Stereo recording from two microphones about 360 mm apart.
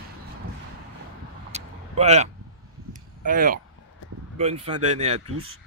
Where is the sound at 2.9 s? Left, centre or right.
Right.